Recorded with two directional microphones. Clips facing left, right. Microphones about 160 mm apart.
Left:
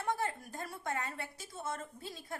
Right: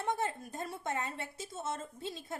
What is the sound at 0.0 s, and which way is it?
A woman's voice, 20° right (ahead or behind).